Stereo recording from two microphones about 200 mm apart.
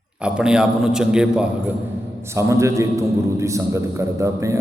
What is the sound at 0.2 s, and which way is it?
A man's voice, 5° right (ahead or behind).